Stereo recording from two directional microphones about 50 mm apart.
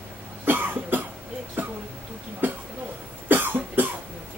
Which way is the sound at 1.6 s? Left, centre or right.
Right.